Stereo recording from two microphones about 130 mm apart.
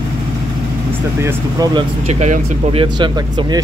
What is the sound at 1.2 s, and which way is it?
Speech, 20° right (ahead or behind).